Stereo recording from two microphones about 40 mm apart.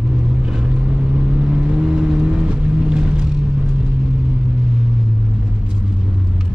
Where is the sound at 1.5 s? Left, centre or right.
Right.